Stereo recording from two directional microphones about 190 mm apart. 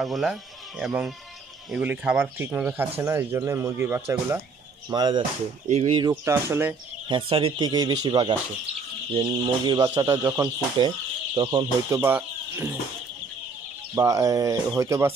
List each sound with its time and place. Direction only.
0.0 s speech: centre (ahead or behind); by 6.1 s 30° right (ahead or behind)
6.2 s speech: 15° right (ahead or behind)
7.1 s speech: 25° right (ahead or behind); by 12.7 s 10° right (ahead or behind)
13.9 s speech: 15° right (ahead or behind)